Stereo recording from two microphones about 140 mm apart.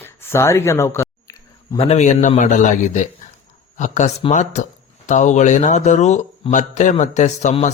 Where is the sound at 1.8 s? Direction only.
50° left (ahead or behind).